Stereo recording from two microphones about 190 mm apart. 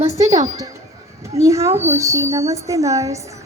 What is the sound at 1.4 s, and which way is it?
Speech, 15° right (ahead or behind).